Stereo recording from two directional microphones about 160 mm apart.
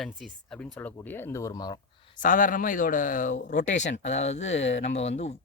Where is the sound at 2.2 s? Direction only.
55° left (ahead or behind).